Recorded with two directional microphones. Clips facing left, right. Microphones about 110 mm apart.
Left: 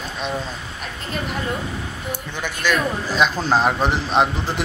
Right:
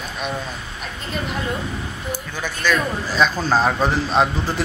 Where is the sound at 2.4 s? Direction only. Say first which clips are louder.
Even; 15° left (ahead or behind).